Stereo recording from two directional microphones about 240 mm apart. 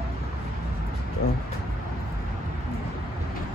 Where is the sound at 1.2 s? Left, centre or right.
Left.